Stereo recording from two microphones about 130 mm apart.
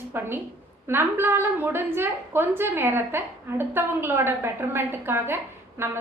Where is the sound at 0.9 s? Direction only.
15° right (ahead or behind).